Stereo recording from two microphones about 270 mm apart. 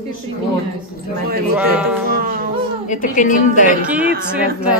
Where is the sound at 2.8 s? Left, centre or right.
Left.